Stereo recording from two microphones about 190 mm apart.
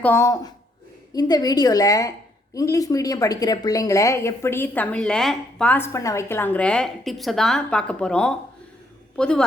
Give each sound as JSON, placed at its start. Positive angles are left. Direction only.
{"t": 0.0, "sound": "a woman's voice", "side_deg": 15}